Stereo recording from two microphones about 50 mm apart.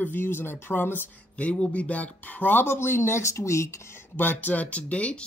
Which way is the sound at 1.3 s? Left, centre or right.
Left.